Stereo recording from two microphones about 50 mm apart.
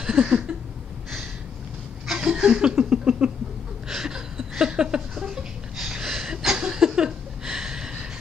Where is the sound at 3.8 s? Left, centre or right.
Centre.